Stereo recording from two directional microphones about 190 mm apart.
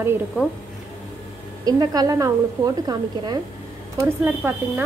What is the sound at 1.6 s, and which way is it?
A woman's voice, 20° right (ahead or behind).